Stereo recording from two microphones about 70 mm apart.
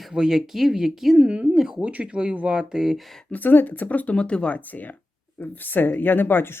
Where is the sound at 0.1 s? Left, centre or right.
Centre.